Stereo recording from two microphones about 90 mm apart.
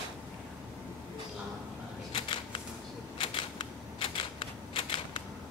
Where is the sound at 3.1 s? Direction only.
80° left.